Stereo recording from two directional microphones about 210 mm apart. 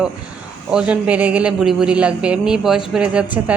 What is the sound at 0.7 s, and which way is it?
A woman's voice, 5° right (ahead or behind).